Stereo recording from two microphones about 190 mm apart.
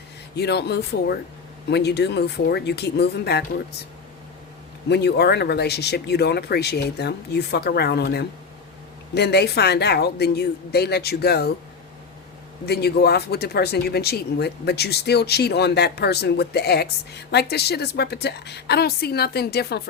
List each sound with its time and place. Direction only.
0.3 s speech: 60° left (ahead or behind)
4.9 s speech: 60° left (ahead or behind)
12.6 s speech: 60° left (ahead or behind)